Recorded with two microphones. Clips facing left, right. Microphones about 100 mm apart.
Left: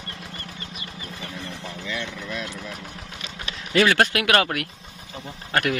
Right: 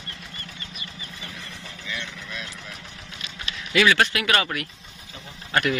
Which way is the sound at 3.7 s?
50° left (ahead or behind).